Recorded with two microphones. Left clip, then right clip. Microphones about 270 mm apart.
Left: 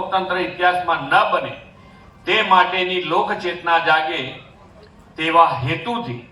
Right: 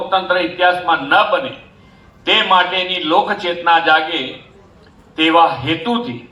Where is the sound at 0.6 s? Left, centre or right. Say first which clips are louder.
Right 2 dB; right.